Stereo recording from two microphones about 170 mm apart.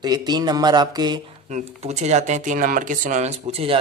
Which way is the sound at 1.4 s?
40° right (ahead or behind).